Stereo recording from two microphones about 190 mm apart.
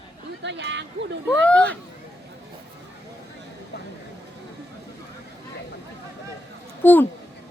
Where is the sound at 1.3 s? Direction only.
5° left (ahead or behind).